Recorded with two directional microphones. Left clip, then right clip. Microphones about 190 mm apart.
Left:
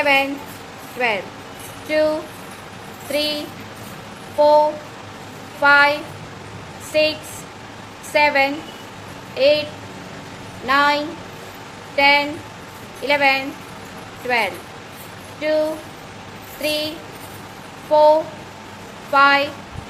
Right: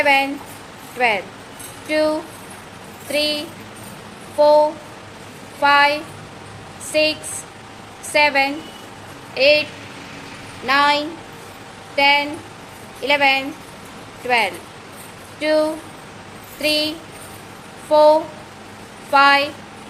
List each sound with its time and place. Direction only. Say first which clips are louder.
0.0 s a woman's voice: right 1 dB; 15° right (ahead or behind)
4.4 s a sound: right 1 dB; 10° right (ahead or behind)
5.6 s a woman's voice: left 1 dB; 10° right (ahead or behind)
10.7 s a woman's voice: right 1 dB; 15° right (ahead or behind)
17.9 s speech: right 1 dB; 25° right (ahead or behind)